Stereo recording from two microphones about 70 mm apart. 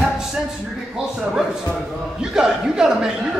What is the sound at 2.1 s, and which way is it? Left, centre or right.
Speech, centre.